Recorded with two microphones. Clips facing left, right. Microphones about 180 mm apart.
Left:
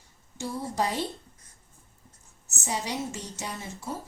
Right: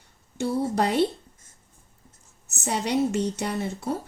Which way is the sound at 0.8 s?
65° right (ahead or behind).